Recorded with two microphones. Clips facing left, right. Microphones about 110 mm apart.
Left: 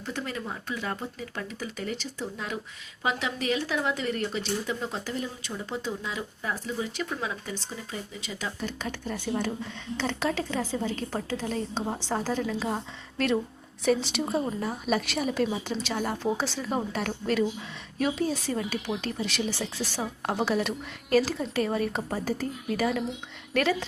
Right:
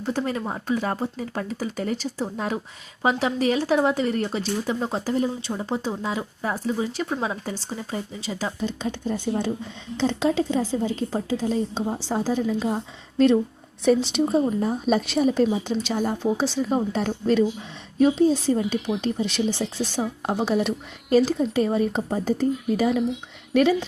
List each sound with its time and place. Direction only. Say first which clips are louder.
0.0 s speech: right 8 dB; 35° right (ahead or behind)
8.6 s a woman's voice: right 7 dB; 20° right (ahead or behind)